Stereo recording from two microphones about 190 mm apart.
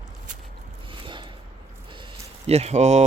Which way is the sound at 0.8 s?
25° right (ahead or behind).